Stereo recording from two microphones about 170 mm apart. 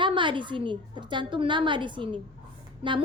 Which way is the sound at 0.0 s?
30° right (ahead or behind).